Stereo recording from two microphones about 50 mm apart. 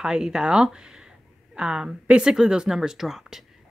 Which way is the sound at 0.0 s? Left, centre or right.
Centre.